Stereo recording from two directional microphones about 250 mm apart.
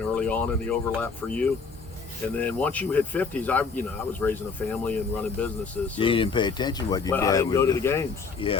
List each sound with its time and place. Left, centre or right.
0.0 s speech: centre
6.0 s speech: left